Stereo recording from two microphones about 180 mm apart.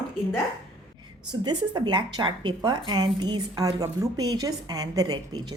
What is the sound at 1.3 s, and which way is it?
Speech, 25° right (ahead or behind).